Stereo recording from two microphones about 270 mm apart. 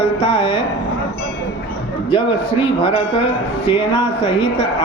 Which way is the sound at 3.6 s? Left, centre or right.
Centre.